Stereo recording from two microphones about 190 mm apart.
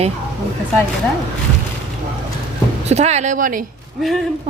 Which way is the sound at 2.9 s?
35° right (ahead or behind).